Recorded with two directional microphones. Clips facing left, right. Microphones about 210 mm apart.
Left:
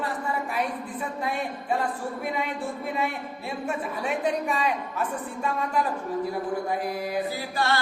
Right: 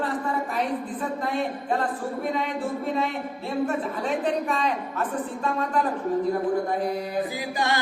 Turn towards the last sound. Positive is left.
turn(degrees=-15)  # may be behind; listen again after turning